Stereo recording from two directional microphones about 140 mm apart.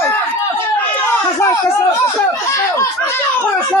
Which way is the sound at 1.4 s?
20° left (ahead or behind).